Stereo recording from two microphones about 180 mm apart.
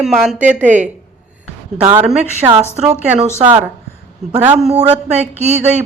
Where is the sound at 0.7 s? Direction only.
45° right (ahead or behind).